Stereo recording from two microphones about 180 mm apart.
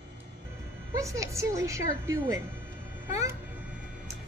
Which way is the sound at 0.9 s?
15° right (ahead or behind).